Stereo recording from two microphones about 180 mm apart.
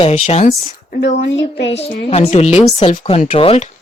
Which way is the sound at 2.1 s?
40° left (ahead or behind).